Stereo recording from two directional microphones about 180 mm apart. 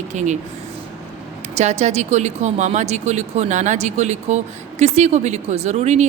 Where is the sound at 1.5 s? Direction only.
40° right (ahead or behind).